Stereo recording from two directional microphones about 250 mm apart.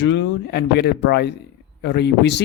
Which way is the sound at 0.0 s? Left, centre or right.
Left.